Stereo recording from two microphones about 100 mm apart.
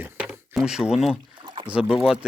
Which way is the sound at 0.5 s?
5° right (ahead or behind).